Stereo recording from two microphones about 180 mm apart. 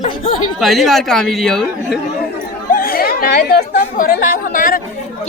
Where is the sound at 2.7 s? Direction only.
55° left (ahead or behind).